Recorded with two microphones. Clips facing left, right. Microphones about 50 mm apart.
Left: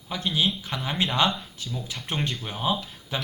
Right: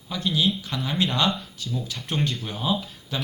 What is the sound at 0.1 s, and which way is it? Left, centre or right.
Speech, left.